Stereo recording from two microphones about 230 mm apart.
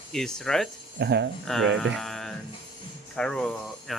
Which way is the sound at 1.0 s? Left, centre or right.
Right.